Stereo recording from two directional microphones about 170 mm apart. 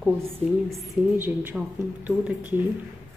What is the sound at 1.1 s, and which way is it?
A woman's voice, 10° right (ahead or behind).